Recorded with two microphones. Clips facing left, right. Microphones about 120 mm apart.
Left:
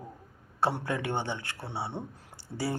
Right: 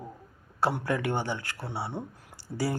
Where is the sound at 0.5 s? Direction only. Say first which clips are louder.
Right 2 dB; 25° left (ahead or behind).